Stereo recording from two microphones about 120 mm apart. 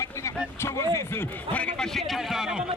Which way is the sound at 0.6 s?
20° left (ahead or behind).